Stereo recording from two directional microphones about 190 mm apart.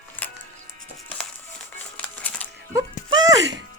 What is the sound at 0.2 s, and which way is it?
Music, 10° left (ahead or behind).